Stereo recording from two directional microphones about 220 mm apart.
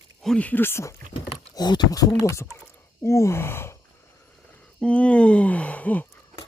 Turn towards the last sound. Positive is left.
turn(degrees=5)  # may be behind; listen again after turning